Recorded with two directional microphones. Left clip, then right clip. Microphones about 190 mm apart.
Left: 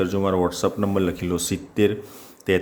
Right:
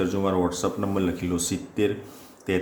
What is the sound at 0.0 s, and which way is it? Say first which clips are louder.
Speech: left 3 dB; 35° left (ahead or behind).